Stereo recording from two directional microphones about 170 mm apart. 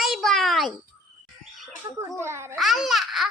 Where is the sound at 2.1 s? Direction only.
15° right (ahead or behind).